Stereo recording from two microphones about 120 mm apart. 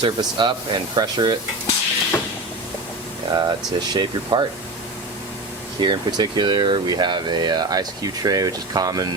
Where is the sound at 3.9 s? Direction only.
35° right (ahead or behind).